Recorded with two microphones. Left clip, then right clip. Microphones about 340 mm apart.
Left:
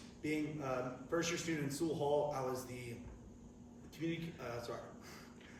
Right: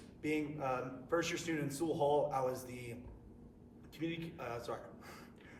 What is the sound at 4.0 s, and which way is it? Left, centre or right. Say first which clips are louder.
Speech: right 1 dB; centre.